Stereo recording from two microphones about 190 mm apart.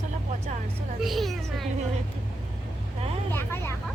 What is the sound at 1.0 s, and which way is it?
Speech, centre (ahead or behind).